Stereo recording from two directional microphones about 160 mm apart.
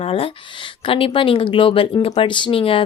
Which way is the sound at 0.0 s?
35° left (ahead or behind).